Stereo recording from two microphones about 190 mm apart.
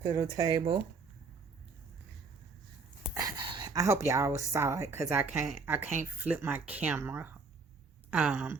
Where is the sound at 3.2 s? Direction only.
20° right (ahead or behind).